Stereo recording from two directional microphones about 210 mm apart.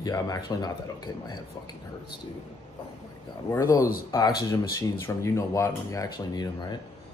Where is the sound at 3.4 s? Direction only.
15° left (ahead or behind).